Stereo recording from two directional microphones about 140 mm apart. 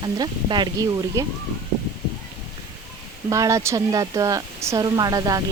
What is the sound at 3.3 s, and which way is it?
A woman's voice, 20° right (ahead or behind).